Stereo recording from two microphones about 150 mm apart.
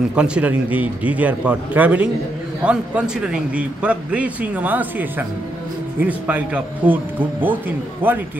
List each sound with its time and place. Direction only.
0.1 s a man's voice: 5° right (ahead or behind)